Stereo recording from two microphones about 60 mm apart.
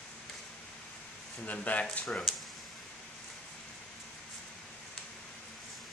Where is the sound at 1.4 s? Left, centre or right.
Left.